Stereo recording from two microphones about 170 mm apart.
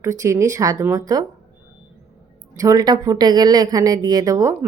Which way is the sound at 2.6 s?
20° right (ahead or behind).